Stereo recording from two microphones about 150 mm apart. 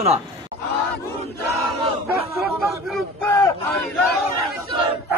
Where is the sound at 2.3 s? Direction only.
Centre (ahead or behind).